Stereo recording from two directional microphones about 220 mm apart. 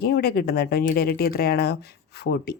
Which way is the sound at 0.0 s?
45° left (ahead or behind).